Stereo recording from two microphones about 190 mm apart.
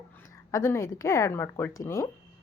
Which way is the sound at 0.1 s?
15° left (ahead or behind).